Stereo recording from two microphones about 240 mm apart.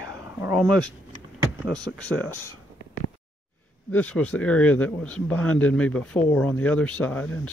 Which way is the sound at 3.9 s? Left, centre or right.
Centre.